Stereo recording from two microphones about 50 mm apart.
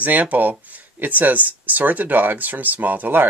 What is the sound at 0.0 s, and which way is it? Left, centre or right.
Speech, right.